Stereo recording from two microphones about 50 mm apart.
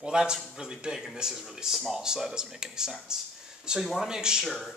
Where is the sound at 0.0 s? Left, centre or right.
Centre.